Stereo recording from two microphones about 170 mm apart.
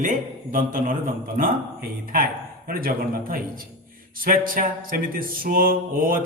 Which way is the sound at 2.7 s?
55° right (ahead or behind).